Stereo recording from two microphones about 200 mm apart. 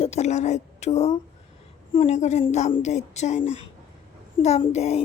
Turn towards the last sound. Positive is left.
turn(degrees=30)  # may be behind; listen again after turning